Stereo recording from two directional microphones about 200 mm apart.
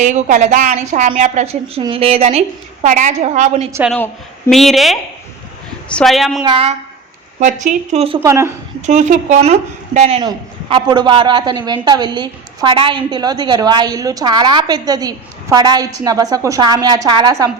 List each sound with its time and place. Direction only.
0.0 s a woman's voice: 40° right (ahead or behind)
3.9 s a woman's voice: 5° left (ahead or behind)
6.4 s a man's voice: 25° right (ahead or behind)
7.3 s a woman's voice: 40° right (ahead or behind)
8.2 s speech: 15° right (ahead or behind)
8.9 s a woman's voice: 40° right (ahead or behind)
10.2 s a man's voice: 20° right (ahead or behind)